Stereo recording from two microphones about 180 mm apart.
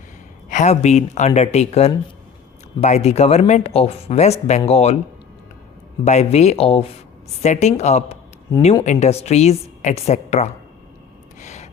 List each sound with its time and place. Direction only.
0.5 s speech: 40° left (ahead or behind)
6.1 s speech: 35° left (ahead or behind)
11.3 s gasp: 40° left (ahead or behind)